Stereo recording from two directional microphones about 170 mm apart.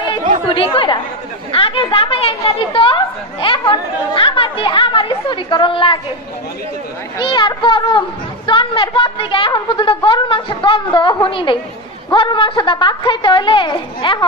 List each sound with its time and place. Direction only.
0.5 s a woman's voice: 30° left (ahead or behind)
7.2 s a woman's voice: 30° left (ahead or behind)